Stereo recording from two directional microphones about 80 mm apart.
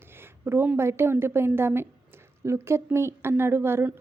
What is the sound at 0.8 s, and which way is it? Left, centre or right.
A woman's voice, right.